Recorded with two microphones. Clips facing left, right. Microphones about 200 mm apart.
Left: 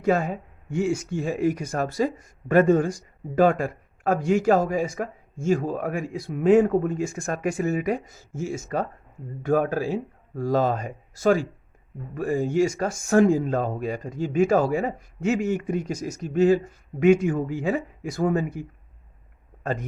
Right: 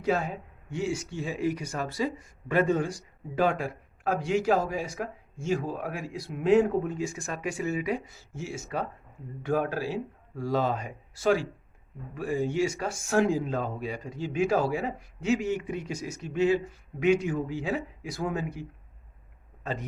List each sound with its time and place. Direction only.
0.0 s speech: 50° left (ahead or behind)